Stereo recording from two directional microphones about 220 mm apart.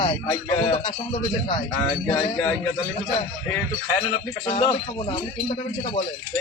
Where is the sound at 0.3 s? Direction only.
20° left (ahead or behind).